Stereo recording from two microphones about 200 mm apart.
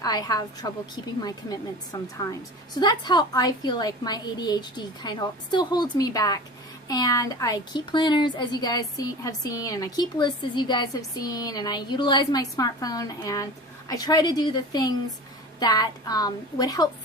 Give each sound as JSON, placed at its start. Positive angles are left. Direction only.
{"t": 0.0, "sound": "a woman's voice", "side_deg": 20}
{"t": 1.9, "sound": "a woman's voice", "side_deg": 15}